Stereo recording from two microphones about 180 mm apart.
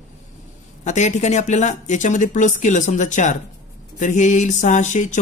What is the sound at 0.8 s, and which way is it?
Speech, 40° left (ahead or behind).